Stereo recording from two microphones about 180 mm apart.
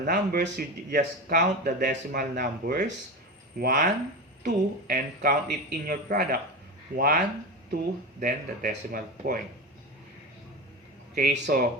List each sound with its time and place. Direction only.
0.0 s speech: 55° right (ahead or behind)
8.2 s speech: 50° right (ahead or behind)
11.1 s speech: 55° right (ahead or behind)